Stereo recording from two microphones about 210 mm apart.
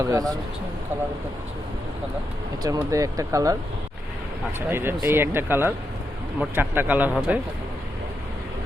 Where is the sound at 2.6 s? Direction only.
15° right (ahead or behind).